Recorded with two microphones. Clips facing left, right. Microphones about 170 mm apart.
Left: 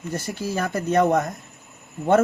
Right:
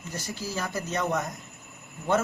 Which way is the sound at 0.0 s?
60° left (ahead or behind).